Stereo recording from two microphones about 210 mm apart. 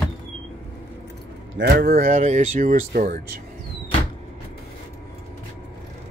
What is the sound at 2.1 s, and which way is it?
Speech, 35° right (ahead or behind).